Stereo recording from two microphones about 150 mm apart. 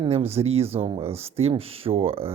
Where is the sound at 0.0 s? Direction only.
40° right (ahead or behind).